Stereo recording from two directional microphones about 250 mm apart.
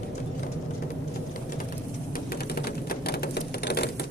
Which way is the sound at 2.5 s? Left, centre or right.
Left.